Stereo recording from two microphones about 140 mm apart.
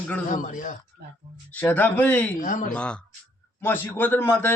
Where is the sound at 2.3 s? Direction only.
70° left (ahead or behind).